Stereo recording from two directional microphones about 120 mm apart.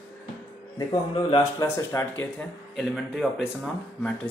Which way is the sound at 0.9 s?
45° left (ahead or behind).